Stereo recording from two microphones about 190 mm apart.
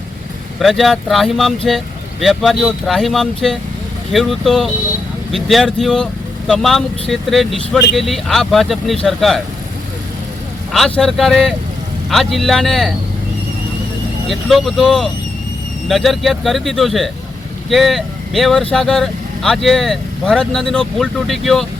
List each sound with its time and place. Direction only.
0.6 s speech: centre (ahead or behind)
10.7 s speech: centre (ahead or behind)
14.3 s speech: centre (ahead or behind)